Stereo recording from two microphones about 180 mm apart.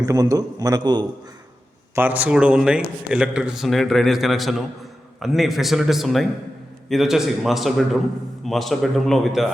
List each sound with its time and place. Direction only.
0.0 s a man's voice: 20° right (ahead or behind)
2.0 s a man's voice: 10° right (ahead or behind)